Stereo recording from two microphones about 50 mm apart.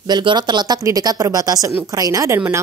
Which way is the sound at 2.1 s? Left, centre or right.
Right.